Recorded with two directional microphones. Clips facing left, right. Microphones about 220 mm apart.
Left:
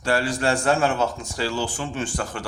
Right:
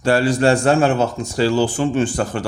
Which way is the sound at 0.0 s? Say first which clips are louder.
Right 7 dB; 30° right (ahead or behind).